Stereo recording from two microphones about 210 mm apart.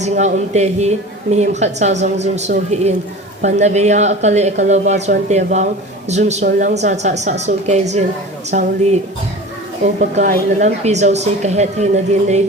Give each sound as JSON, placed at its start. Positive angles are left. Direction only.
{"t": 0.0, "sound": "a woman's voice", "side_deg": -35}